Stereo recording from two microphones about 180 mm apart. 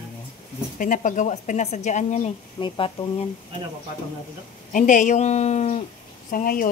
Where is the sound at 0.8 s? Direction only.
45° left (ahead or behind).